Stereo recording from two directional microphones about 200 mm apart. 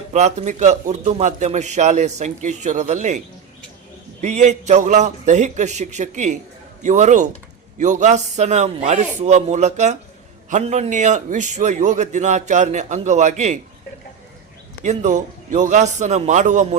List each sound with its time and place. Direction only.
0.1 s a man's voice: 35° right (ahead or behind)
4.2 s a man's voice: 35° right (ahead or behind)
14.8 s a man's voice: 40° right (ahead or behind)